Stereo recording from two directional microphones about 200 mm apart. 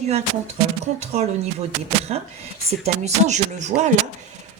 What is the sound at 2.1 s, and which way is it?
A woman's voice, 30° right (ahead or behind).